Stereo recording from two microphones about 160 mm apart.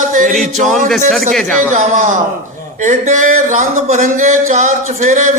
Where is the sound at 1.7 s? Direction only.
50° right (ahead or behind).